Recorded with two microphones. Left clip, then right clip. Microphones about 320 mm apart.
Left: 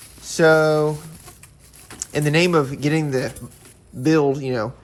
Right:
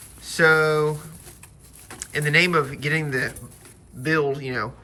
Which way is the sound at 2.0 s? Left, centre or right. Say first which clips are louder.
Even; centre.